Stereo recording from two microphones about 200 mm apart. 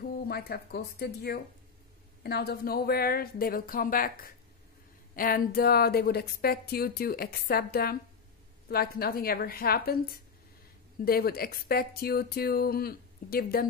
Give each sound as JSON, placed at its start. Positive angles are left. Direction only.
{"t": 0.3, "sound": "speech", "side_deg": 50}